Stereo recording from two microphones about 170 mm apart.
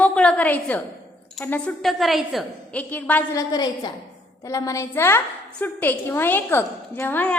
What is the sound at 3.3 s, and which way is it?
Child singing, 25° left (ahead or behind).